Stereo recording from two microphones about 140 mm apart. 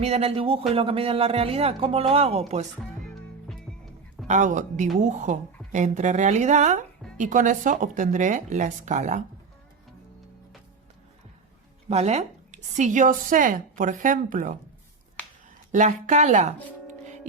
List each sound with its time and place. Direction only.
0.0 s a man's voice: 45° right (ahead or behind)
2.7 s music: 5° left (ahead or behind)
4.3 s speech: 60° right (ahead or behind)
11.9 s a woman's voice: 50° right (ahead or behind); by 14.5 s 70° right (ahead or behind)
15.7 s speech: 60° right (ahead or behind)